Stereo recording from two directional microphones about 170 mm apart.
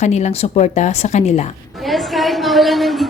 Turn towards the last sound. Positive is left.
turn(degrees=0)  # may be behind; listen again after turning